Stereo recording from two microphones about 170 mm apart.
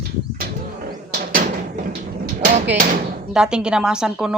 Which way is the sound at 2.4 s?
50° right (ahead or behind).